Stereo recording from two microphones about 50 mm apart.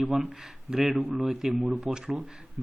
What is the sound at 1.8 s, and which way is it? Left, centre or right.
Speech, centre.